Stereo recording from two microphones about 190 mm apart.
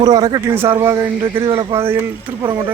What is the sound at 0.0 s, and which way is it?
Speech, 20° right (ahead or behind).